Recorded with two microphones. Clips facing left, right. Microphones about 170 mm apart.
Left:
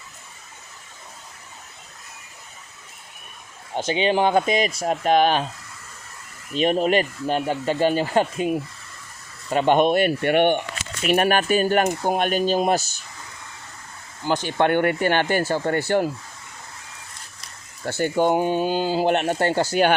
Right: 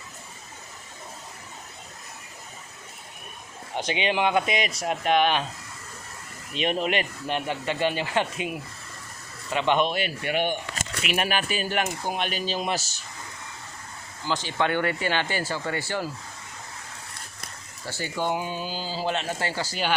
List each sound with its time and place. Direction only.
3.8 s speech: 30° left (ahead or behind)
6.5 s speech: 40° left (ahead or behind)
14.3 s speech: 55° left (ahead or behind)
17.8 s speech: 55° left (ahead or behind)